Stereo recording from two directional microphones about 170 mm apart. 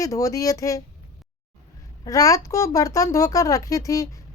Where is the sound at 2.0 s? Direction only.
20° left (ahead or behind).